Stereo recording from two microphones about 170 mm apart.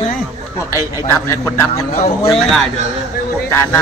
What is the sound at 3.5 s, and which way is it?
Speech, 15° left (ahead or behind).